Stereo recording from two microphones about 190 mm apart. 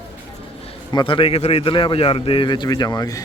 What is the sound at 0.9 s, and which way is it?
A man's voice, 25° left (ahead or behind).